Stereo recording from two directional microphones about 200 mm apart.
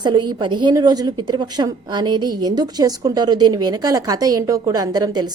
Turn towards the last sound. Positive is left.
turn(degrees=-20)  # may be behind; listen again after turning